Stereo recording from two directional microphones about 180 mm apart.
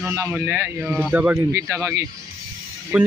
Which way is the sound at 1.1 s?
10° right (ahead or behind).